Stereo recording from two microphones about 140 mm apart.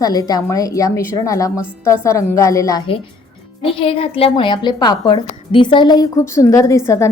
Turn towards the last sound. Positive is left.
turn(degrees=20)  # may be behind; listen again after turning